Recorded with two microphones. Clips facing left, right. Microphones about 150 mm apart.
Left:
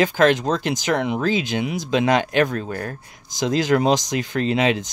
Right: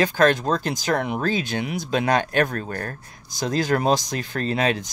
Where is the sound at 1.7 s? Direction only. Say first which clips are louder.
Left 2 dB; 90° left.